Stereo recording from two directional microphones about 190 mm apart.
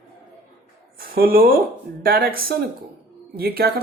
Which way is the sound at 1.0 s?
50° right (ahead or behind).